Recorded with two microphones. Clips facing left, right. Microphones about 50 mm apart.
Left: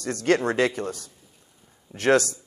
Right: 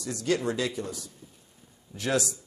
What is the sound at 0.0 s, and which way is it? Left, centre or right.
A man's voice, left.